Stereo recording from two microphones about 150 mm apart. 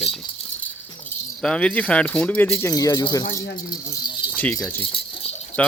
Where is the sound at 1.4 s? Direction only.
5° left (ahead or behind); by 3.2 s 25° left (ahead or behind).